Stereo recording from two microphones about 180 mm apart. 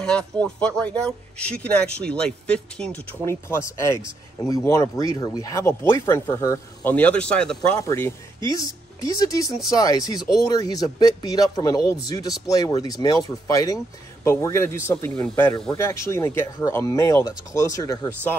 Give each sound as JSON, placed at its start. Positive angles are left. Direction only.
{"t": 0.0, "sound": "speech", "side_deg": 5}
{"t": 8.5, "sound": "a woman's voice", "side_deg": 20}